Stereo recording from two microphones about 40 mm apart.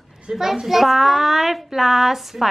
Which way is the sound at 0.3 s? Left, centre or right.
Centre.